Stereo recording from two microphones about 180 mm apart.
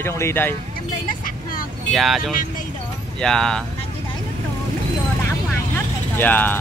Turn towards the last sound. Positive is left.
turn(degrees=10)  # may be behind; listen again after turning